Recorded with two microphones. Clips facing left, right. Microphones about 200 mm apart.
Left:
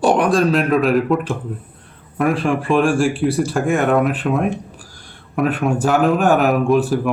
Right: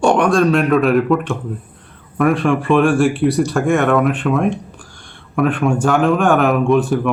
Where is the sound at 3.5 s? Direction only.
35° left (ahead or behind).